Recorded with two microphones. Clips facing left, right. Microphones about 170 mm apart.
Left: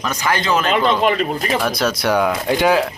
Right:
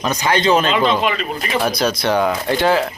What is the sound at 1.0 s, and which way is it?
Speech, 45° left (ahead or behind).